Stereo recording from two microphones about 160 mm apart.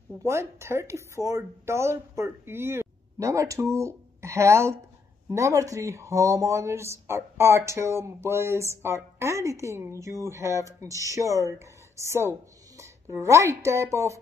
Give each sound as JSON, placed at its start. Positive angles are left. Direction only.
{"t": 0.2, "sound": "speech", "side_deg": -15}